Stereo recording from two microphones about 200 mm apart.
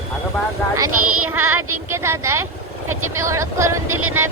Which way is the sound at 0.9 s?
90° right.